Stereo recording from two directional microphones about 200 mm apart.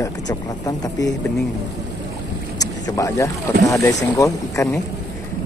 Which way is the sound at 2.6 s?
15° left (ahead or behind).